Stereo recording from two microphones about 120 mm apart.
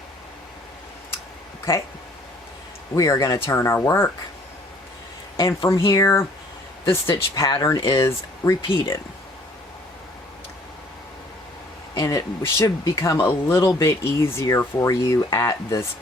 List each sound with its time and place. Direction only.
2.9 s speech: 30° left (ahead or behind)
5.5 s speech: 25° left (ahead or behind)
11.9 s speech: 25° left (ahead or behind)